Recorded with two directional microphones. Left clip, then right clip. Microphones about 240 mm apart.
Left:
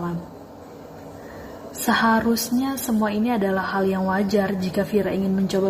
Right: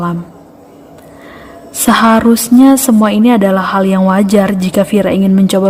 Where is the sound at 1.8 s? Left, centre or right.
Right.